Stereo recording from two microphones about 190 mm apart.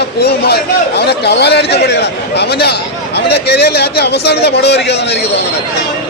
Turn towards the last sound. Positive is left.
turn(degrees=60)  # may be behind; listen again after turning